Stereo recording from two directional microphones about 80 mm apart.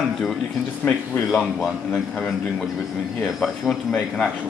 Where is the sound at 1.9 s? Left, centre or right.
Centre.